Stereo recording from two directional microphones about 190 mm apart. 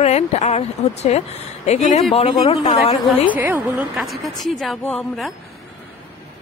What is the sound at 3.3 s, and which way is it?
Speech, 10° right (ahead or behind).